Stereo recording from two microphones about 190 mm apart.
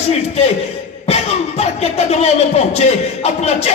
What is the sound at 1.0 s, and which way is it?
Speech, 35° left (ahead or behind).